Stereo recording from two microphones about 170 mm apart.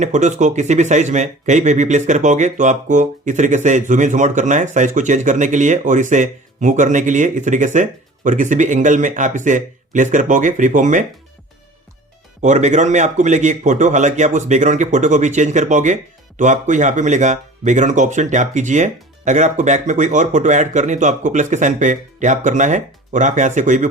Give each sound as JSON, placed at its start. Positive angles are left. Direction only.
{"t": 0.0, "sound": "speech", "side_deg": -45}
{"t": 12.4, "sound": "speech", "side_deg": -45}